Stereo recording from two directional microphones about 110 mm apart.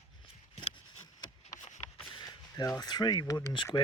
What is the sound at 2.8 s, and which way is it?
Speech, 40° left (ahead or behind).